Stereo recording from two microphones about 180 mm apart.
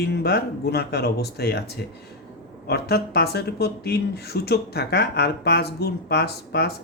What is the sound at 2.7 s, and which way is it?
Speech, 65° left (ahead or behind).